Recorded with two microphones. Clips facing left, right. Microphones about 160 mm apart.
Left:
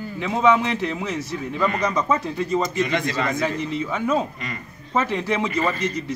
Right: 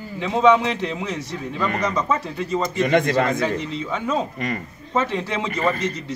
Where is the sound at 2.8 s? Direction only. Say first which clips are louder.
Right 5 dB; 55° right (ahead or behind).